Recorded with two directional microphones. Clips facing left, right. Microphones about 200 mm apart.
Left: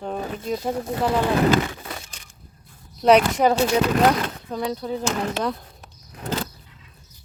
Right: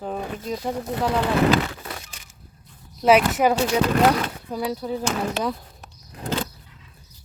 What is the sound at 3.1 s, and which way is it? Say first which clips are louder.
Speech: left 1 dB; 5° right (ahead or behind).